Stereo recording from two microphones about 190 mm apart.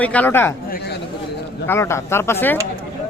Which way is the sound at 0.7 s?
60° left (ahead or behind).